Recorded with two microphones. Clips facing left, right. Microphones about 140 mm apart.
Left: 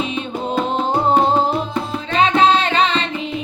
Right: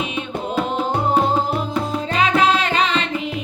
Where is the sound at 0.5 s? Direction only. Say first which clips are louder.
Left 2 dB; 10° right (ahead or behind).